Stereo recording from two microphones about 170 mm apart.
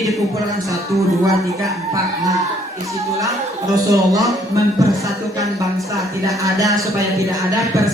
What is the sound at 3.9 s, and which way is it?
Speech, 20° right (ahead or behind).